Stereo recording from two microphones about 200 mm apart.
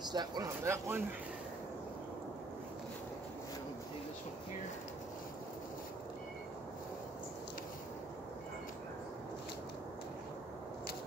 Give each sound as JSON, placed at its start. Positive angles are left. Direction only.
{"t": 0.1, "sound": "speech", "side_deg": -20}